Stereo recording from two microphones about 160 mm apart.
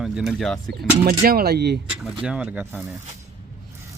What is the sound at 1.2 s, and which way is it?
Speech, 70° right (ahead or behind).